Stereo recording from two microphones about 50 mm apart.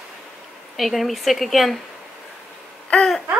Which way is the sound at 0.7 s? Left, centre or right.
Centre.